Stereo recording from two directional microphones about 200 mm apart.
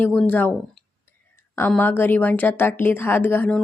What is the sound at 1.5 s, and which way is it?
A woman's voice, 10° left (ahead or behind).